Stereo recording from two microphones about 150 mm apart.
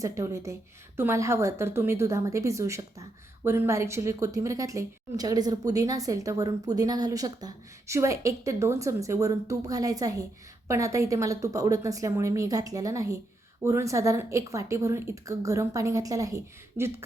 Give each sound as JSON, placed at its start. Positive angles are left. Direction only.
{"t": 0.0, "sound": "a woman's voice", "side_deg": -20}